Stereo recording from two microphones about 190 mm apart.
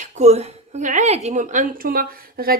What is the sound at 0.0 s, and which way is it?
Speech, 35° right (ahead or behind).